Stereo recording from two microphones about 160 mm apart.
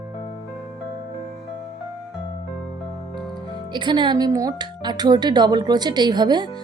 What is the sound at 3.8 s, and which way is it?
Speech, 30° right (ahead or behind).